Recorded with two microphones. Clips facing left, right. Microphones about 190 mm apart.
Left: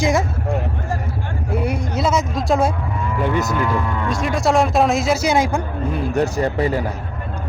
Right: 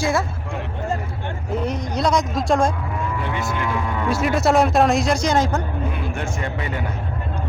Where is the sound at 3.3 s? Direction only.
40° left (ahead or behind).